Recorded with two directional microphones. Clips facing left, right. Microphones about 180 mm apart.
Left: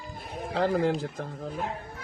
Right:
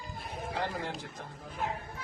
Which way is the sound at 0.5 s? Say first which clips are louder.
Left 11 dB; 90° left.